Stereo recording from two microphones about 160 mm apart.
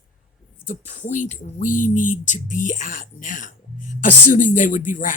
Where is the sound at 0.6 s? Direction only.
50° left (ahead or behind).